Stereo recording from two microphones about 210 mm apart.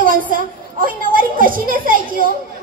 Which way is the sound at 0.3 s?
40° right (ahead or behind).